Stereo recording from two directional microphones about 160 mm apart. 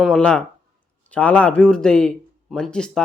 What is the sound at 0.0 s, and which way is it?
A man's voice, 5° left (ahead or behind).